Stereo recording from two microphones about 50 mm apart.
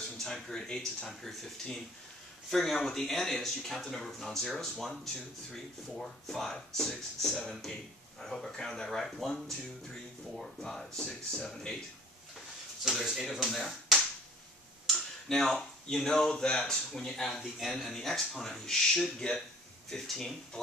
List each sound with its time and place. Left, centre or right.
0.2 s speech: centre
2.5 s speech: centre
11.0 s speech: centre
12.8 s speech: centre